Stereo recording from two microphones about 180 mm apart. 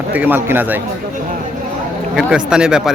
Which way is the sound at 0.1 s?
10° right (ahead or behind).